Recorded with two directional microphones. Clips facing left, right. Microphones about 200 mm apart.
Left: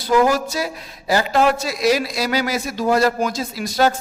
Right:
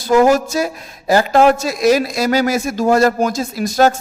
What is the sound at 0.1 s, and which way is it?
A man's voice, 45° right (ahead or behind).